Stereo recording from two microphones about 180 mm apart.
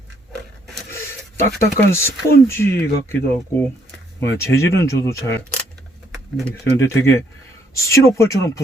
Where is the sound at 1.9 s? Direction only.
15° left (ahead or behind).